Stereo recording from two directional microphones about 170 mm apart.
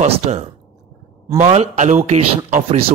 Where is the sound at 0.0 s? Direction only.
40° right (ahead or behind).